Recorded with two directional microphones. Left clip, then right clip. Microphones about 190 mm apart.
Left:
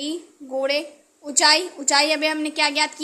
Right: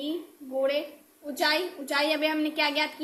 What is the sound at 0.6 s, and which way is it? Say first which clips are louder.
A woman's voice: left 4 dB; 25° left (ahead or behind).